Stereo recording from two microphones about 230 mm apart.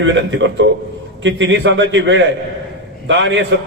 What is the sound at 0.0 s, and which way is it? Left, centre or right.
A man's voice, right.